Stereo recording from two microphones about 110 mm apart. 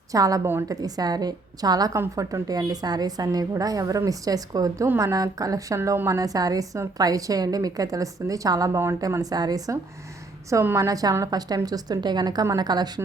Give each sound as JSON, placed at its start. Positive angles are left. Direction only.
{"t": 0.1, "sound": "a woman's voice", "side_deg": -30}
{"t": 10.5, "sound": "a woman's voice", "side_deg": -25}